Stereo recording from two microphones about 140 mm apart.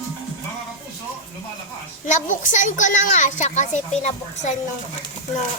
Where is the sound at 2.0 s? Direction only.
65° left (ahead or behind).